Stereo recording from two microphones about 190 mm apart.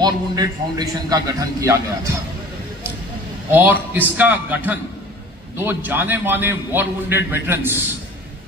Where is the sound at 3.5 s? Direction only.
10° right (ahead or behind).